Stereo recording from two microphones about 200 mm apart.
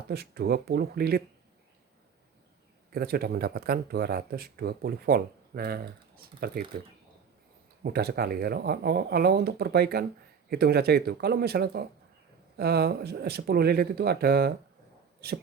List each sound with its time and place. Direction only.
0.1 s speech: 50° right (ahead or behind)
2.9 s speech: 50° right (ahead or behind)
7.9 s speech: 50° right (ahead or behind)